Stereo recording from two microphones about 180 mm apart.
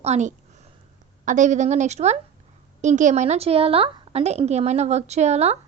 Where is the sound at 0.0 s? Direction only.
40° right (ahead or behind).